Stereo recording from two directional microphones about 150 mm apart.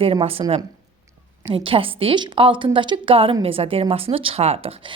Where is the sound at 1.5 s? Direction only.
35° right (ahead or behind).